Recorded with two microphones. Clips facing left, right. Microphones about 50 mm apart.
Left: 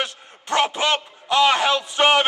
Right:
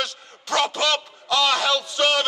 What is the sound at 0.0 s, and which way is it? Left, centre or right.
A man's voice, left.